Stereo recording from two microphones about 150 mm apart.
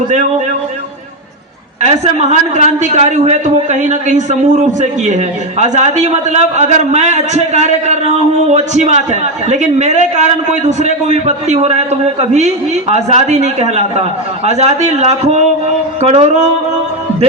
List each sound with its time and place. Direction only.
1.8 s a man's voice: 50° right (ahead or behind)